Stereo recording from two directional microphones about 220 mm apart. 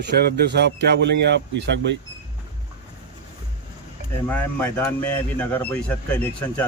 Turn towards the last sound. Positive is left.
turn(degrees=10)  # may be behind; listen again after turning